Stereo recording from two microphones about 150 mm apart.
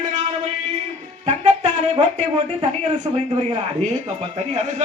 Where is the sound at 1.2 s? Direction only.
50° right (ahead or behind).